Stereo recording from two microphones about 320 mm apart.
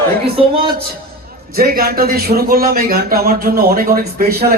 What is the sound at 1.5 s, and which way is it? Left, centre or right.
A man's voice, right.